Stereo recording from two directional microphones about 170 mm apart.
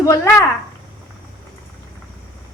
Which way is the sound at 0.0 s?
20° left (ahead or behind).